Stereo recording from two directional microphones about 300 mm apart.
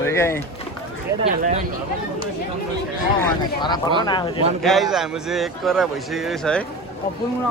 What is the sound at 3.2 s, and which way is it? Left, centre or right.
Speech, centre.